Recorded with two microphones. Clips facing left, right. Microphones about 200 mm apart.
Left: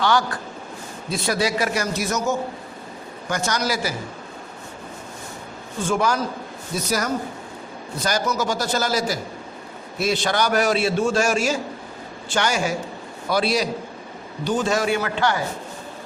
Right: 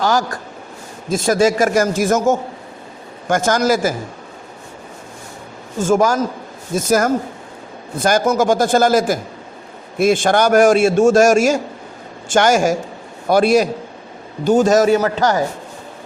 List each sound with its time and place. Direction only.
0.0 s a man's voice: 45° right (ahead or behind)
5.8 s a man's voice: 45° right (ahead or behind)